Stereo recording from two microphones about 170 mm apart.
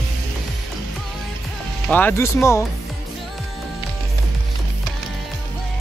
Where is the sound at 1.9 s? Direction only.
10° left (ahead or behind).